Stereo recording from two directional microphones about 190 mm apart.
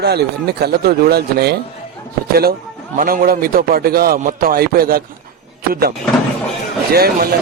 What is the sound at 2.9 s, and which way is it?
A man's voice, 50° right (ahead or behind).